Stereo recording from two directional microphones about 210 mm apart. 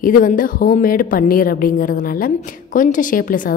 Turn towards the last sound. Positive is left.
turn(degrees=40)  # may be behind; listen again after turning